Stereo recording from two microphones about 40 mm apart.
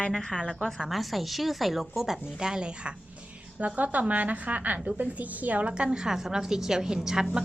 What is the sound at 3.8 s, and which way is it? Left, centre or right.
A woman's voice, right.